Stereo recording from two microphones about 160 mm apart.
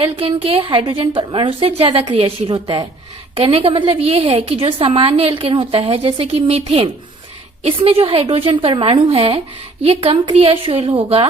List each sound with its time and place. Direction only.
0.0 s a woman's voice: 35° right (ahead or behind)